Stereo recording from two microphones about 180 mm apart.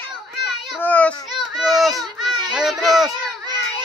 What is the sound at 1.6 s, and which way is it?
Baby cry, centre (ahead or behind).